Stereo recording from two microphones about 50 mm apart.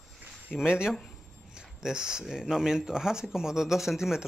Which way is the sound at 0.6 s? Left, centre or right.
Centre.